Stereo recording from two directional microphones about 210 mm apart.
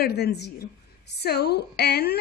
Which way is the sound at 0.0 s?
50° left (ahead or behind).